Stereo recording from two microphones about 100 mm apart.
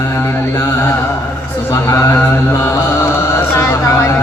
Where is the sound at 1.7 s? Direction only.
30° left (ahead or behind).